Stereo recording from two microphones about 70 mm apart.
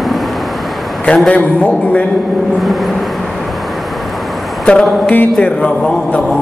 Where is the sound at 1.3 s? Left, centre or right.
Centre.